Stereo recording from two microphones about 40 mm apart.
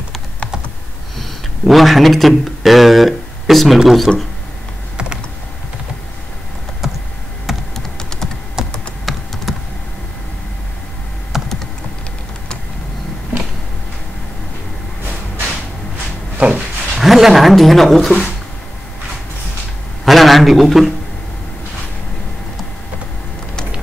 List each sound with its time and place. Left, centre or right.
1.7 s speech: centre
6.8 s computer keyboard: centre
7.7 s typing: centre
8.6 s typing: centre
9.1 s typing: centre
11.3 s computer keyboard: centre
16.3 s a sound: right
17.0 s a sound: centre
20.1 s a man's voice: centre